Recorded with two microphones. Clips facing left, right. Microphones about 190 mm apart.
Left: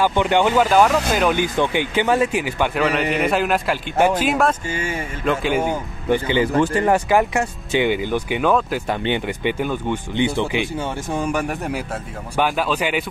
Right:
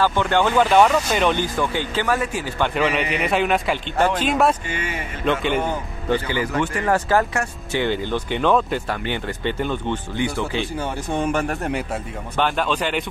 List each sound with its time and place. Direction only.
0.0 s speech: 15° left (ahead or behind)
0.6 s a man's voice: 5° left (ahead or behind)
1.4 s speech: 15° left (ahead or behind)
2.7 s a man's voice: centre (ahead or behind); by 6.9 s 30° left (ahead or behind)
6.9 s speech: 15° left (ahead or behind)
8.8 s speech: 20° left (ahead or behind)
10.1 s speech: 20° left (ahead or behind)
11.1 s a man's voice: centre (ahead or behind)